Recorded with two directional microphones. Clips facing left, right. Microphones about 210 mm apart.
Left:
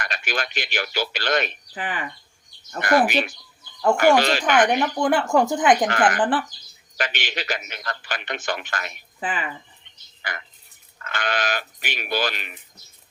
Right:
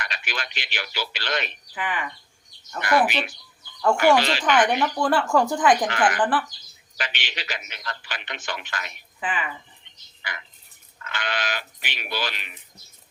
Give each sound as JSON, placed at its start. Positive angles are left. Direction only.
{"t": 0.0, "sound": "a man's voice", "side_deg": 45}
{"t": 4.7, "sound": "speech", "side_deg": 15}
{"t": 5.9, "sound": "a man's voice", "side_deg": 45}
{"t": 11.0, "sound": "a man's voice", "side_deg": 45}